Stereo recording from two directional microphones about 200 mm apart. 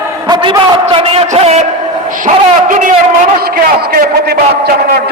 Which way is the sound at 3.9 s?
50° right (ahead or behind).